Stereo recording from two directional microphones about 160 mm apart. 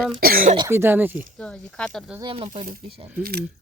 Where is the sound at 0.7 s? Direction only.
15° right (ahead or behind).